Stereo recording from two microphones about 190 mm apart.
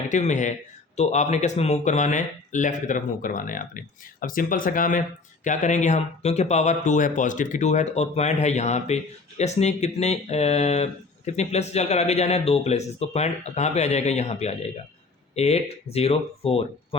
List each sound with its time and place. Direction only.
0.1 s speech: 40° left (ahead or behind)